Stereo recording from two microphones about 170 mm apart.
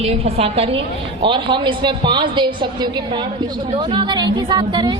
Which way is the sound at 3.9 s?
30° right (ahead or behind).